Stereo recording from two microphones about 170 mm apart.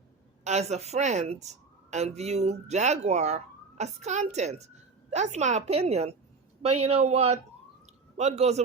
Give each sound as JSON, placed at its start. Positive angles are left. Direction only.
{"t": 0.4, "sound": "speech", "side_deg": -40}